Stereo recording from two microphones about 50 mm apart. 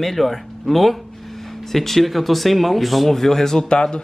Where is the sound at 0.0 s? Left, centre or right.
Centre.